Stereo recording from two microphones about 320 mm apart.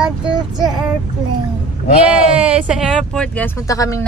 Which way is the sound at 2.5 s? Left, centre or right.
Centre.